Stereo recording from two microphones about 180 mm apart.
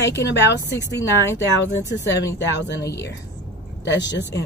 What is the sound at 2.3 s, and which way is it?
Speech, 75° left (ahead or behind).